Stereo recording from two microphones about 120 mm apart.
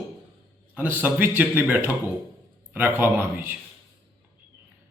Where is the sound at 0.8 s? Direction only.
15° right (ahead or behind).